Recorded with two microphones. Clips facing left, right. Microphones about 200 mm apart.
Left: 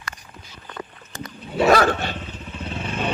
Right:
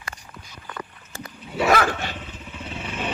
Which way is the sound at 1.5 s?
35° left (ahead or behind).